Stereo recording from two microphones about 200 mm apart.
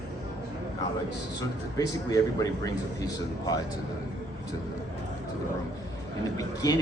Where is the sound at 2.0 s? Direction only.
15° left (ahead or behind).